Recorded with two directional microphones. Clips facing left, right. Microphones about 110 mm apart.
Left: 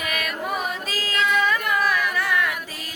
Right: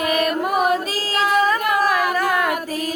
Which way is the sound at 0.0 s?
40° right (ahead or behind).